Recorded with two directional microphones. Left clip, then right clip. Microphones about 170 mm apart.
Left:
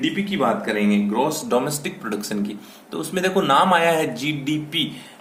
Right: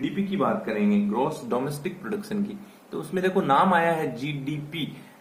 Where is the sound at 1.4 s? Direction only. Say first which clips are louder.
Left 6 dB; 20° left (ahead or behind).